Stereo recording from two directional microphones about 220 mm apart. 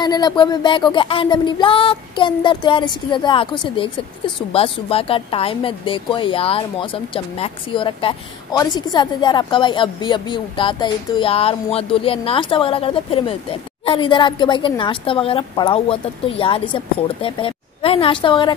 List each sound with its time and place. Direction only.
0.0 s speech: 20° left (ahead or behind)